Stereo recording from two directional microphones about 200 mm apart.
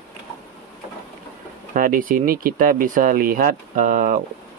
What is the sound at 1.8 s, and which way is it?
Speech, 45° right (ahead or behind).